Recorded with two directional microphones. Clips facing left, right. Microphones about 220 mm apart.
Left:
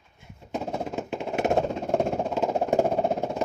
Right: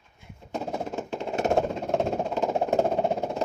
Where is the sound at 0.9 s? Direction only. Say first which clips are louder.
Left 1 dB; 10° left (ahead or behind).